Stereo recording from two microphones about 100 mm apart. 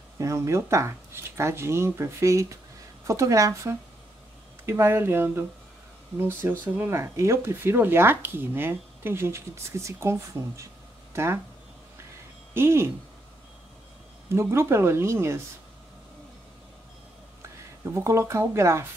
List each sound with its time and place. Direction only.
0.2 s speech: 30° right (ahead or behind)
12.5 s speech: 25° right (ahead or behind)
14.3 s speech: 25° right (ahead or behind)
17.9 s speech: 30° right (ahead or behind)